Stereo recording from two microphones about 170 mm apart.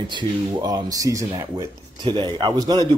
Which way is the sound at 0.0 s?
25° right (ahead or behind).